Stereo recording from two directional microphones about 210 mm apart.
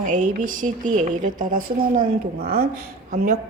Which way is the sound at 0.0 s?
40° right (ahead or behind).